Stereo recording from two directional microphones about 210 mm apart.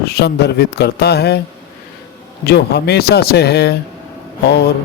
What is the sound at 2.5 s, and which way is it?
Speech, 50° left (ahead or behind).